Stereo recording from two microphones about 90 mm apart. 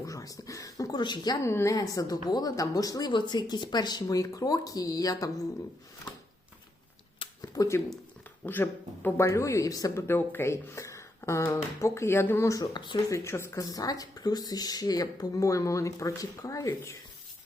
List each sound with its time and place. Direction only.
0.0 s a sound: 40° left (ahead or behind)
1.0 s speech: 55° left (ahead or behind)
1.5 s a woman's voice: 30° left (ahead or behind)
1.7 s speech: 40° left (ahead or behind)
3.1 s speech: 55° left (ahead or behind)
4.0 s speech: 40° left (ahead or behind)
7.2 s a sound: 70° left (ahead or behind)
7.6 s speech: 50° left (ahead or behind)
8.4 s speech: 20° left (ahead or behind); by 10.0 s 40° left (ahead or behind)
10.1 s speech: 25° left (ahead or behind)
12.7 s speech: 60° left (ahead or behind)
13.1 s speech: 30° left (ahead or behind)
13.7 s speech: 45° left (ahead or behind)